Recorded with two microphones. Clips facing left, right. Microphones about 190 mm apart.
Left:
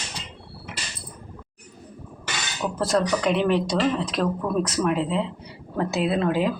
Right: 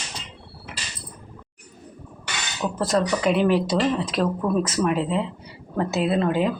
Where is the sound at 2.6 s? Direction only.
Centre (ahead or behind).